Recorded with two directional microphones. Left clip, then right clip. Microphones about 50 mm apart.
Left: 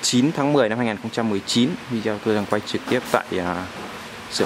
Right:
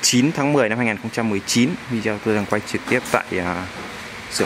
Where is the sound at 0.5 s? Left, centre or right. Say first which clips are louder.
Right 1 dB; centre.